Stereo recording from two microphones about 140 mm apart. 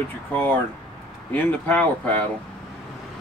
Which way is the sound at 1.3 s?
10° left (ahead or behind).